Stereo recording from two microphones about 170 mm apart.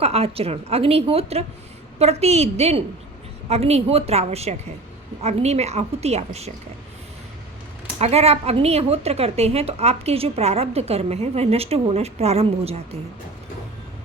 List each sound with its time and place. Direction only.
0.0 s speech: 35° right (ahead or behind)
7.9 s speech: 40° right (ahead or behind)